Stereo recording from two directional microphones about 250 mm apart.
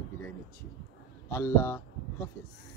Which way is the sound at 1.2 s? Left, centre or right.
Centre.